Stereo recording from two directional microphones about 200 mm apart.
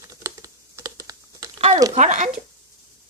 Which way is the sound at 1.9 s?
35° right (ahead or behind).